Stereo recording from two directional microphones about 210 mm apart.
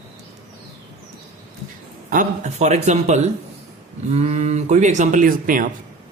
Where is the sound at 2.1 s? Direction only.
35° right (ahead or behind).